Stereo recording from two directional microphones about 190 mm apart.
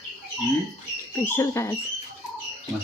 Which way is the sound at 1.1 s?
15° left (ahead or behind).